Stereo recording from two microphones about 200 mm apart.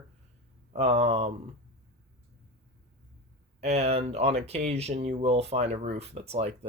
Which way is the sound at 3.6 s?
35° right (ahead or behind).